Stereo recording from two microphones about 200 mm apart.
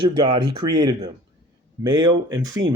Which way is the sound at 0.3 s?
20° right (ahead or behind).